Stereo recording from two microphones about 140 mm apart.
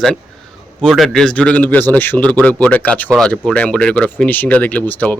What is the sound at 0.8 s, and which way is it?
Speech, centre (ahead or behind).